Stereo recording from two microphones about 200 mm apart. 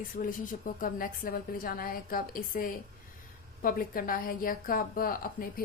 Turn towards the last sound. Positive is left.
turn(degrees=45)  # may be behind; listen again after turning